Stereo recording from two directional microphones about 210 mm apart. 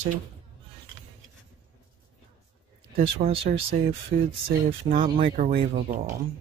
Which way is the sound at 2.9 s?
40° right (ahead or behind).